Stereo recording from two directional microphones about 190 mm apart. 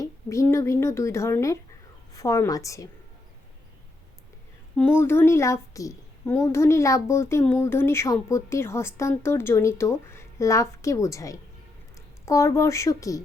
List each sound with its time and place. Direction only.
0.0 s a woman's voice: 15° left (ahead or behind)
4.8 s a woman's voice: 10° left (ahead or behind)